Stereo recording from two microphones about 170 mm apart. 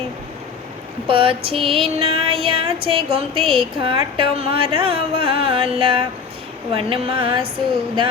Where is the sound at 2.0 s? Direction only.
35° right (ahead or behind).